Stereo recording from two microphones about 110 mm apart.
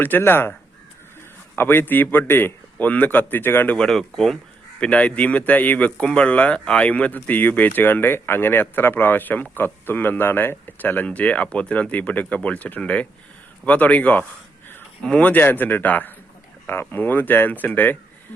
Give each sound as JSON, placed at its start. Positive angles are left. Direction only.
{"t": 0.0, "sound": "speech", "side_deg": 20}
{"t": 1.5, "sound": "a man's voice", "side_deg": 20}